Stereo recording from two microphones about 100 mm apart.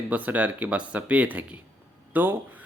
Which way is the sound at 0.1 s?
15° right (ahead or behind).